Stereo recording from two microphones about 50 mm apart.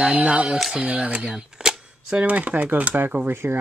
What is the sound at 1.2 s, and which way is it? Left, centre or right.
Speech, centre.